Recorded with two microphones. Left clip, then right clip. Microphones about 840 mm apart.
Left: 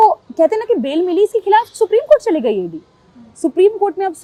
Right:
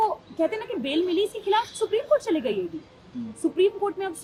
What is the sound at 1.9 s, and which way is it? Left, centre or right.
Speech, left.